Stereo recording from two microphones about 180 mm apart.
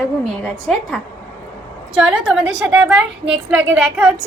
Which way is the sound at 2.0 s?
5° right (ahead or behind).